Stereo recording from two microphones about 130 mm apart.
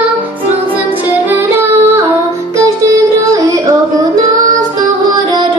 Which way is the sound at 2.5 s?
25° right (ahead or behind).